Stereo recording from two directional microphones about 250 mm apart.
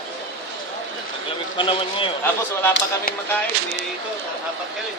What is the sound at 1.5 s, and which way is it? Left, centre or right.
Speech, centre.